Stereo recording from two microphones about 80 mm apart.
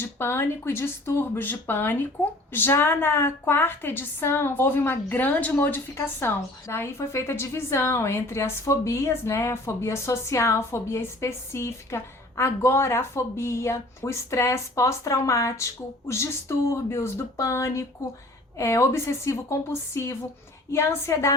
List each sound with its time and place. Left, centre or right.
0.0 s a woman's voice: left